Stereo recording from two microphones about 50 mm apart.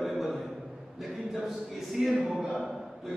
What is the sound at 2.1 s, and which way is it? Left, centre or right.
Speech, right.